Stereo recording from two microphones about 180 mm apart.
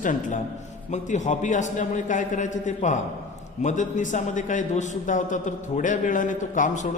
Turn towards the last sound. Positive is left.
turn(degrees=45)  # may be behind; listen again after turning